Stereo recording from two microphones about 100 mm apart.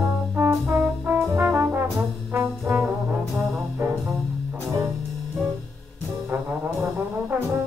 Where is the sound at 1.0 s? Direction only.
20° right (ahead or behind).